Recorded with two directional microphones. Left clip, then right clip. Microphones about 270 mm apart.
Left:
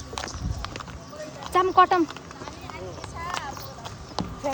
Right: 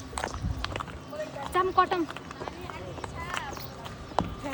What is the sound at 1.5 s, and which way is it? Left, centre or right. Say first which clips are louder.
Speech: left 6 dB; left.